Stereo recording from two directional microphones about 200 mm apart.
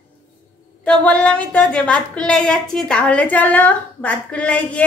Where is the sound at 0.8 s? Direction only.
5° left (ahead or behind).